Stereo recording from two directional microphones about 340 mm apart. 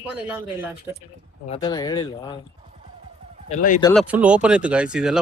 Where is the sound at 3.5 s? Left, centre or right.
Left.